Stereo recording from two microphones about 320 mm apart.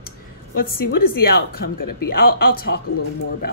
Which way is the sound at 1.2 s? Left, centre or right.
Left.